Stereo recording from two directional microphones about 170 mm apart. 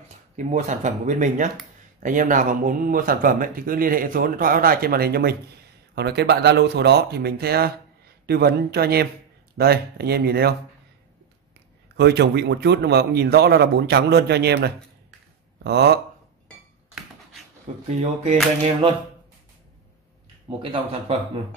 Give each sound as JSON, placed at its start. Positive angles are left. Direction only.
{"t": 0.5, "sound": "speech", "side_deg": -45}
{"t": 12.0, "sound": "speech", "side_deg": -80}
{"t": 17.8, "sound": "speech", "side_deg": -40}
{"t": 20.5, "sound": "speech", "side_deg": -30}